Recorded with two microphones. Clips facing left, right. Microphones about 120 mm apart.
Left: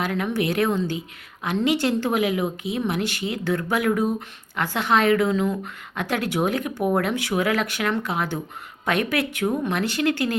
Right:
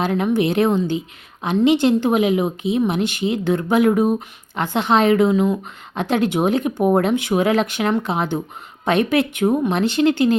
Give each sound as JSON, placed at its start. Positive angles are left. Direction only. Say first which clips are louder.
{"t": 0.0, "sound": "a woman's voice", "louder": "right 6 dB", "side_deg": -25}